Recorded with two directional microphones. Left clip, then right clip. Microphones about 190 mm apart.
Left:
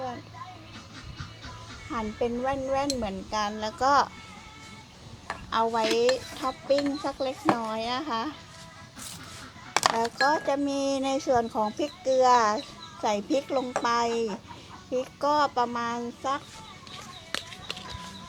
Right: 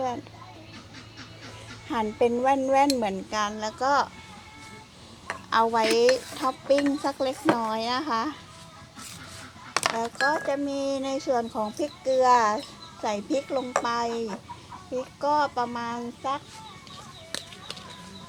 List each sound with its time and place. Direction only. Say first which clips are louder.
1.9 s speech: right 6 dB; 20° right (ahead or behind)
3.6 s speech: left 2 dB; 5° left (ahead or behind)
5.5 s speech: right 3 dB; 20° right (ahead or behind)
9.7 s speech: left 2 dB; 15° left (ahead or behind)